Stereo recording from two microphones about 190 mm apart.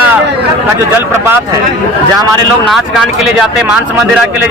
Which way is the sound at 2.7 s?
Centre (ahead or behind).